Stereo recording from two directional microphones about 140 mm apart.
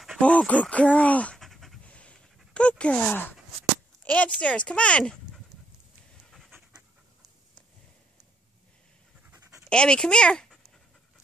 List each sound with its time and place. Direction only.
0.2 s pant: 10° left (ahead or behind)
4.0 s speech: 10° left (ahead or behind)
9.3 s pant: 15° right (ahead or behind)
9.7 s speech: 5° left (ahead or behind)